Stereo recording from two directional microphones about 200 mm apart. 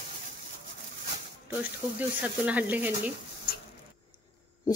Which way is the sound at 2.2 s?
10° right (ahead or behind).